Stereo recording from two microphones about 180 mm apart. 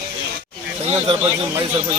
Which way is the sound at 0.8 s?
35° right (ahead or behind).